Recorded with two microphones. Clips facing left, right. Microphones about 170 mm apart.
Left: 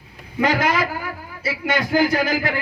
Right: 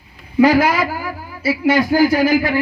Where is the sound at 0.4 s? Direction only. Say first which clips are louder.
Right 6 dB; 30° right (ahead or behind).